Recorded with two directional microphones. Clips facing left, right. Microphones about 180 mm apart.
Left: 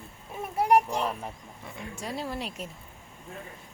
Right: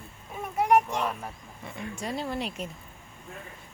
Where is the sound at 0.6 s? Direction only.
35° left (ahead or behind).